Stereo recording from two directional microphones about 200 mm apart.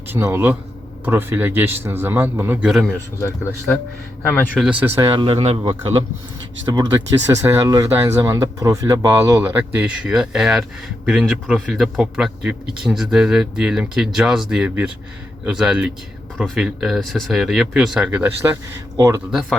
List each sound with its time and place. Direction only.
0.1 s a man's voice: 10° right (ahead or behind)
4.3 s speech: 10° left (ahead or behind)
4.6 s a man's voice: 5° right (ahead or behind)
5.0 s speech: 25° right (ahead or behind)
7.3 s a man's voice: 10° right (ahead or behind)
19.3 s speech: centre (ahead or behind)